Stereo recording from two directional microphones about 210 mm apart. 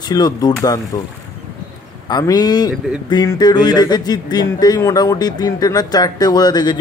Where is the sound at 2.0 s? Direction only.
20° left (ahead or behind).